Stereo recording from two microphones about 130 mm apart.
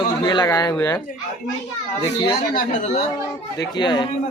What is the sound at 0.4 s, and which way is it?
Speech, 30° left (ahead or behind).